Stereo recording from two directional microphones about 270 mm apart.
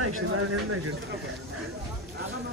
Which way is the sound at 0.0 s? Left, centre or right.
Right.